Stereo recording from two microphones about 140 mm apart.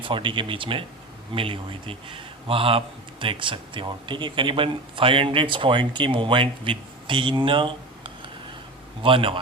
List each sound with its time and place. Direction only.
0.0 s a man's voice: 35° right (ahead or behind)